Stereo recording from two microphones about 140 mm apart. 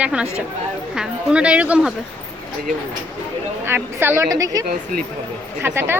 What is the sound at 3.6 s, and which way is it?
A woman's voice, 15° right (ahead or behind).